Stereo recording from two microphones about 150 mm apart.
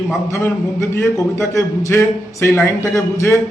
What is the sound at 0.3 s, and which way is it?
A man's voice, 20° left (ahead or behind).